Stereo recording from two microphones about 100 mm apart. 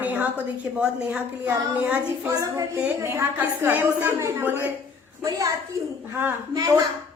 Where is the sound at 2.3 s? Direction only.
35° right (ahead or behind).